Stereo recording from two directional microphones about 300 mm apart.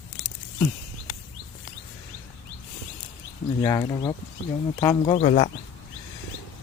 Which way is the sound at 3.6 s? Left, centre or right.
Centre.